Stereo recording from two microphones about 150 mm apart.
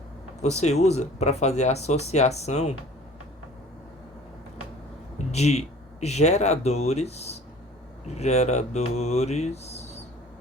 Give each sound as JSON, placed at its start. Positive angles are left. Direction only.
{"t": 0.6, "sound": "mantra", "side_deg": 50}
{"t": 5.1, "sound": "speech", "side_deg": 45}
{"t": 8.0, "sound": "mantra", "side_deg": 45}